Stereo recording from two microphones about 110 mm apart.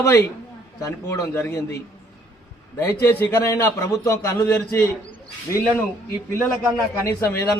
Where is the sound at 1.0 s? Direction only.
25° left (ahead or behind).